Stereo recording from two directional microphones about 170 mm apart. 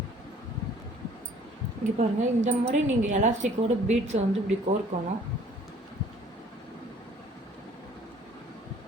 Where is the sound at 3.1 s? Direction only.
45° right (ahead or behind).